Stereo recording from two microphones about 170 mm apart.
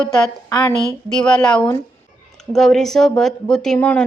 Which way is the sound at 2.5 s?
Centre (ahead or behind).